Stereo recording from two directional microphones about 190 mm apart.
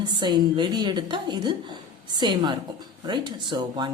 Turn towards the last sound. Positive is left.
turn(degrees=-25)  # may be behind; listen again after turning